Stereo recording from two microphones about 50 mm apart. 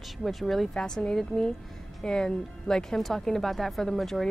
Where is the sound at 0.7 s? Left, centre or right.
Centre.